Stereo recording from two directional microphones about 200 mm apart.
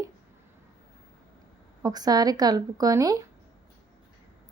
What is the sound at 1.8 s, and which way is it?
Speech, 20° right (ahead or behind).